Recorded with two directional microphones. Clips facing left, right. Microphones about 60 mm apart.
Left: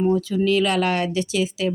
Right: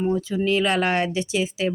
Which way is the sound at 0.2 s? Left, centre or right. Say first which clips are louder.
Left 2 dB; right.